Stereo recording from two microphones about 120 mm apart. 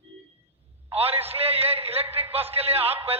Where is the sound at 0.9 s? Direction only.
55° right (ahead or behind).